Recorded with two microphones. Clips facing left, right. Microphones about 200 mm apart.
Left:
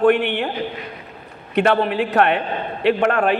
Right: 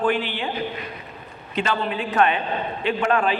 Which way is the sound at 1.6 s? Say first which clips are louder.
Left 7 dB; 60° left (ahead or behind).